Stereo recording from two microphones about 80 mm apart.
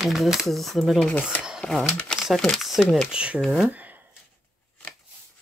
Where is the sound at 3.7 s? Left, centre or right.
Centre.